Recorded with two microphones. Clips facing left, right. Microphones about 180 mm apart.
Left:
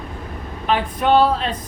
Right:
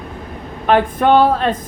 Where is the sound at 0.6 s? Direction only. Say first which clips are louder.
Right 6 dB; 50° right (ahead or behind).